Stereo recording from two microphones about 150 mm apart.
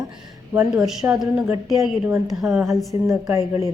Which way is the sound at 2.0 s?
25° right (ahead or behind).